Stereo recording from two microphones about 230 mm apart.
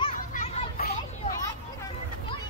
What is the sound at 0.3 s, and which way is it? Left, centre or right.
Children playing, left.